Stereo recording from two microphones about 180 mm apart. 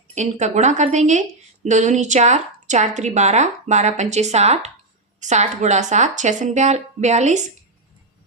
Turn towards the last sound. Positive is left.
turn(degrees=-40)  # may be behind; listen again after turning